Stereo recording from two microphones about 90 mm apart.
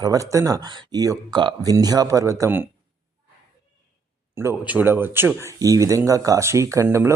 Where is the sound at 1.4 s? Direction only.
60° right (ahead or behind).